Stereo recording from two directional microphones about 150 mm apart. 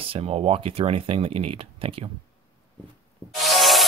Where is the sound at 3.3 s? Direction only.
Centre (ahead or behind).